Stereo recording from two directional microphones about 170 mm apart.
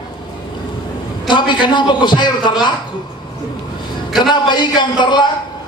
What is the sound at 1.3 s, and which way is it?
A man's voice, 25° left (ahead or behind).